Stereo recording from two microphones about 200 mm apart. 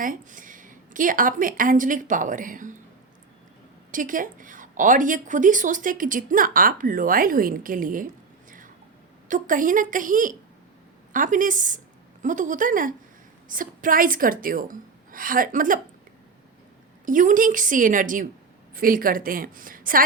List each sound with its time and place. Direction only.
0.0 s a woman's voice: 40° right (ahead or behind)
3.9 s a woman's voice: 40° right (ahead or behind)
17.1 s a woman's voice: 40° right (ahead or behind)